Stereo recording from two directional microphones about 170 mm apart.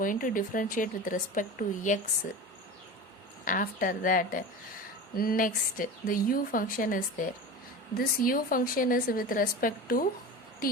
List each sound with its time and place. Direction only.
0.0 s speech: 55° left (ahead or behind)
3.4 s speech: 50° left (ahead or behind)